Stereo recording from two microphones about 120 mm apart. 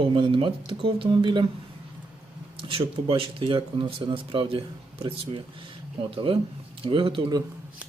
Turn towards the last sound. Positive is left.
turn(degrees=-45)  # may be behind; listen again after turning